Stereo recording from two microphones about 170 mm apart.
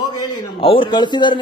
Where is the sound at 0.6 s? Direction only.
30° left (ahead or behind).